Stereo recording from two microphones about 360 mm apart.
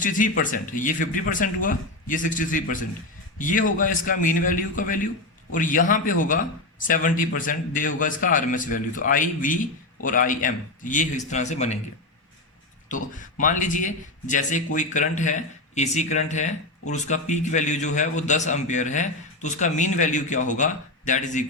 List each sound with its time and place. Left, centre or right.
0.0 s a man's voice: left
13.4 s a man's voice: left